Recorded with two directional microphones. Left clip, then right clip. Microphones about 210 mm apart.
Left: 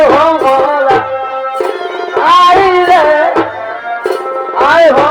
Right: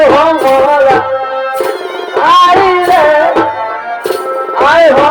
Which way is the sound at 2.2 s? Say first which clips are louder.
Even; 35° right (ahead or behind).